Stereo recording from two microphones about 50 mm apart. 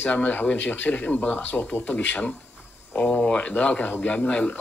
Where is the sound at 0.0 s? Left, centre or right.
Left.